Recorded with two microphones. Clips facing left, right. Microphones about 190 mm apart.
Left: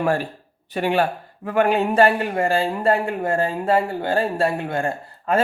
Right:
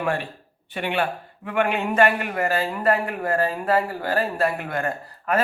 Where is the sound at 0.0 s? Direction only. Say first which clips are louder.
Left 4 dB; 40° left (ahead or behind).